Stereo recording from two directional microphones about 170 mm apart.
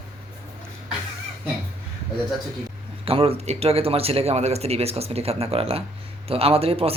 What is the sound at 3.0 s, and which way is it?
Speech, 35° right (ahead or behind).